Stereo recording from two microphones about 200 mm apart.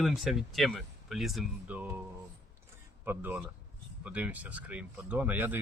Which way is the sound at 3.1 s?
10° right (ahead or behind).